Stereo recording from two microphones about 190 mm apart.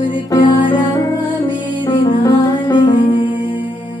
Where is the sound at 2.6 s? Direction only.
25° left (ahead or behind).